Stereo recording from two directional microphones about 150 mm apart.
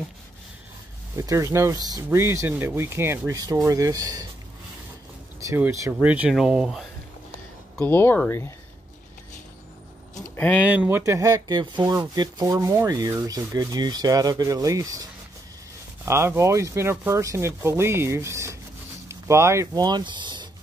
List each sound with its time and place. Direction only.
1.1 s speech: 20° right (ahead or behind)
5.4 s sanding: 20° right (ahead or behind); by 6.9 s 5° right (ahead or behind)
7.7 s speech: 10° left (ahead or behind)
10.1 s a sound: 10° left (ahead or behind)
10.7 s speech: 15° right (ahead or behind)
16.1 s sanding: 20° right (ahead or behind)
19.0 s speech: 20° right (ahead or behind)